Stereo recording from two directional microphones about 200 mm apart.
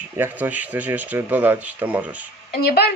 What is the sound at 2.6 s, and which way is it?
Speech, 55° left (ahead or behind).